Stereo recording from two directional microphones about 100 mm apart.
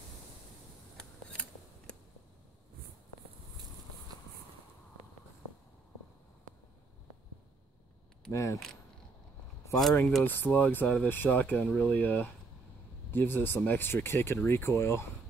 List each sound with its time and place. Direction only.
0.9 s scissors: 10° left (ahead or behind)
8.3 s speech: 30° left (ahead or behind)
9.7 s speech: centre (ahead or behind)
10.2 s speech: 20° left (ahead or behind)